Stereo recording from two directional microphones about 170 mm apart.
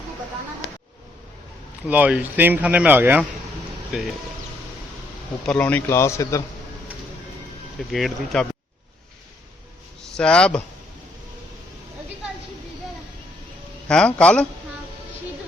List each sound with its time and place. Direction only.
1.9 s speech: 10° right (ahead or behind)
5.5 s speech: 10° left (ahead or behind)
7.9 s speech: centre (ahead or behind)
10.0 s speech: 5° left (ahead or behind)
13.8 s speech: 5° left (ahead or behind)